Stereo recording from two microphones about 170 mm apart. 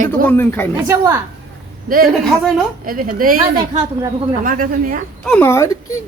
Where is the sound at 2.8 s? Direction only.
55° right (ahead or behind).